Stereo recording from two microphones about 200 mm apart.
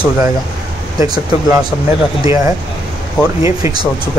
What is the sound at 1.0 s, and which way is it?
Speech, 20° right (ahead or behind).